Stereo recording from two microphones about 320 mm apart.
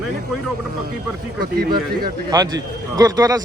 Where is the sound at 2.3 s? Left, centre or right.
Centre.